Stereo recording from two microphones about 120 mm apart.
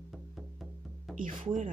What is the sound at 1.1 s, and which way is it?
Speech, 90° right.